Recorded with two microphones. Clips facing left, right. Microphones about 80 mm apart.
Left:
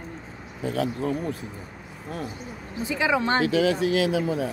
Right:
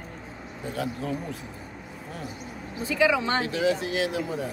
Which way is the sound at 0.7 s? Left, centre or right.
Left.